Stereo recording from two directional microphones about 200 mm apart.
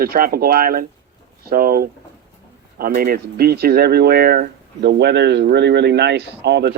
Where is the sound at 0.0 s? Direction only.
50° right (ahead or behind).